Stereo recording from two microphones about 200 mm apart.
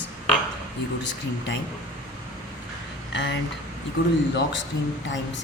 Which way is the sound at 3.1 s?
60° left (ahead or behind).